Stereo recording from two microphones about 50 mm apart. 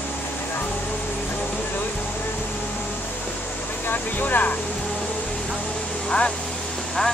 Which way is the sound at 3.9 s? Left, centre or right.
Left.